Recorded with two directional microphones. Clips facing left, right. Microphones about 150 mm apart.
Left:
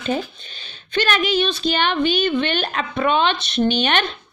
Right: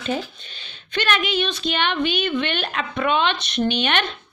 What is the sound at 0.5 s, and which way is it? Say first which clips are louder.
A woman's voice: left 4 dB; 35° left (ahead or behind).